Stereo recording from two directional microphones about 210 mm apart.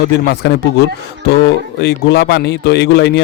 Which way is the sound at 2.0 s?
50° left (ahead or behind).